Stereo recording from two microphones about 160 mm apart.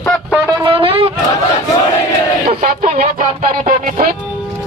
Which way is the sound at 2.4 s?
50° right (ahead or behind).